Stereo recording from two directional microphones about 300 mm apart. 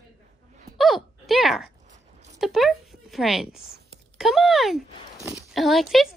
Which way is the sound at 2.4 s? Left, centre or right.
Centre.